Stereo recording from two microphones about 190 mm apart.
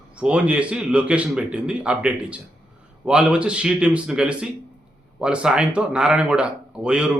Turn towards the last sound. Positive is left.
turn(degrees=-5)  # may be behind; listen again after turning